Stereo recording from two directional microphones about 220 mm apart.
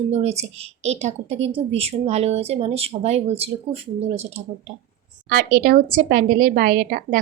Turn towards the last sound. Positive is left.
turn(degrees=-40)  # may be behind; listen again after turning